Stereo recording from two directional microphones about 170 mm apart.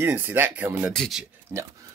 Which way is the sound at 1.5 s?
15° right (ahead or behind).